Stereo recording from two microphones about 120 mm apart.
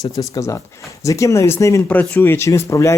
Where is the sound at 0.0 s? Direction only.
25° left (ahead or behind).